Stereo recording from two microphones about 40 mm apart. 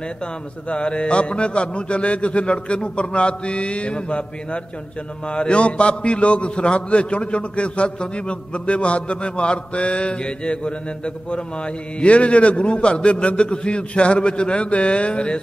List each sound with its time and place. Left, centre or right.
0.7 s a man's voice: left